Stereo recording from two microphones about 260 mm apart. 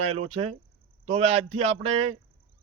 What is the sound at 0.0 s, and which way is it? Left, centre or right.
A man's voice, right.